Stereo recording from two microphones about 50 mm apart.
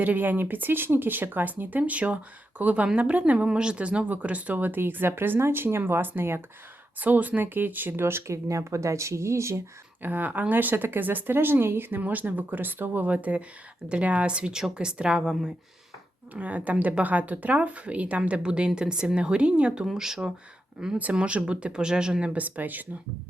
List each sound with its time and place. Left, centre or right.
0.0 s speech: right
7.0 s speech: right
10.0 s speech: right
13.1 s a woman's voice: right; by 15.5 s centre
16.3 s speech: right
19.8 s a woman's voice: centre
21.2 s speech: right
22.3 s speech: right